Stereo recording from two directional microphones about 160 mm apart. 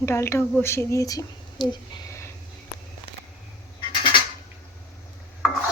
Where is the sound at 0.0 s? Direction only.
15° left (ahead or behind).